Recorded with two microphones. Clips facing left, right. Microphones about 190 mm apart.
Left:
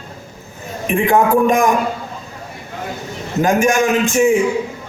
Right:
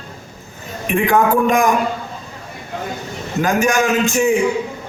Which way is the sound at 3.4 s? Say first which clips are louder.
Left 2 dB; 20° left (ahead or behind).